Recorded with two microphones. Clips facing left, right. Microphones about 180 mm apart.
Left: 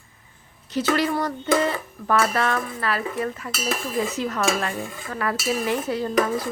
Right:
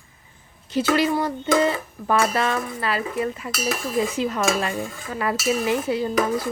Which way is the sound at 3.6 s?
15° right (ahead or behind).